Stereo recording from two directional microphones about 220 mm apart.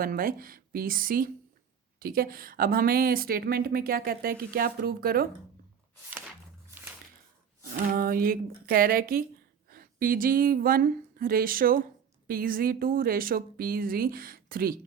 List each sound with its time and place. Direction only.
0.0 s a woman's voice: 40° right (ahead or behind)
7.9 s a woman's voice: 40° right (ahead or behind)